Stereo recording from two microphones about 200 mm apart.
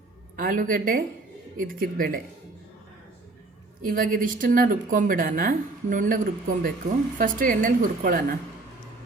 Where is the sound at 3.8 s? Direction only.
45° right (ahead or behind).